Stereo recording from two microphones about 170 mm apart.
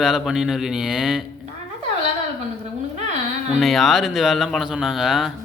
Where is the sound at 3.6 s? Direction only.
Centre (ahead or behind).